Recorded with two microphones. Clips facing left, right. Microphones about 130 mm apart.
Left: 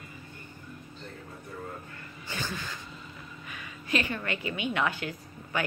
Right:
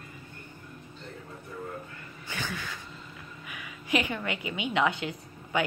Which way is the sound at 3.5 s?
15° right (ahead or behind).